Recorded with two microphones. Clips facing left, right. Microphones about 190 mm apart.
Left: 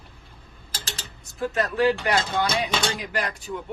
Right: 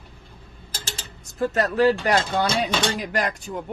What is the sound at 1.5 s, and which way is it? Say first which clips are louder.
Speech: right 2 dB; 40° right (ahead or behind).